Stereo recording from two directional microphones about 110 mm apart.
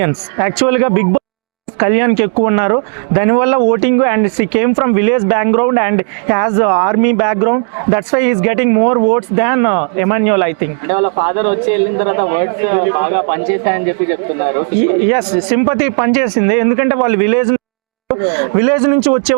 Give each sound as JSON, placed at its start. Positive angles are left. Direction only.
{"t": 0.0, "sound": "speech", "side_deg": -20}